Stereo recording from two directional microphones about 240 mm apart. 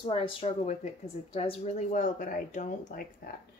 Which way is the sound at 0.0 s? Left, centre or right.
Left.